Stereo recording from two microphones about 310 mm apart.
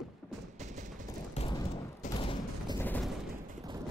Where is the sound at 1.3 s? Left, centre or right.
Centre.